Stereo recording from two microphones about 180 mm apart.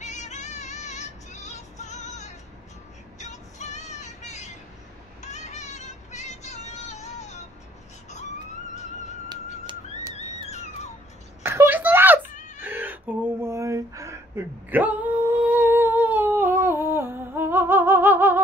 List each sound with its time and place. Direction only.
0.0 s music: 40° left (ahead or behind)
3.2 s vehicle: 40° left (ahead or behind)
5.2 s music: 40° left (ahead or behind)
8.7 s music: 40° left (ahead or behind)
10.5 s a sound: 40° left (ahead or behind)
11.4 s a sound: 15° right (ahead or behind)